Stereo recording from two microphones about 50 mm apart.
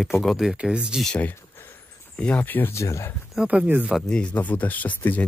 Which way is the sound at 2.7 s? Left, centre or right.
Left.